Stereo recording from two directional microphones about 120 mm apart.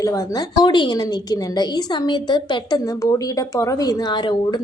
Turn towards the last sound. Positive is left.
turn(degrees=35)  # may be behind; listen again after turning